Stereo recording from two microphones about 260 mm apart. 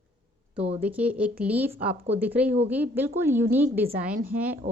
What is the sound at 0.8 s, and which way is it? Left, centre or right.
Speech, centre.